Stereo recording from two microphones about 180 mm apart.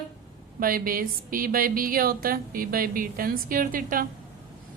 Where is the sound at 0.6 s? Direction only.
50° right (ahead or behind).